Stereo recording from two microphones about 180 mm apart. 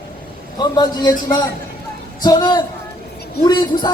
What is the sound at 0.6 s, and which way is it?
Speech, 25° left (ahead or behind).